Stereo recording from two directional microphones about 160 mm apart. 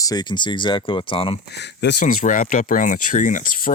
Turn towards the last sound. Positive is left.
turn(degrees=55)  # may be behind; listen again after turning